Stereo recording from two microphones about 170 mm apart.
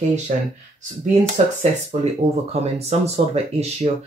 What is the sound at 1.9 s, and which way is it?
Speech, 45° right (ahead or behind).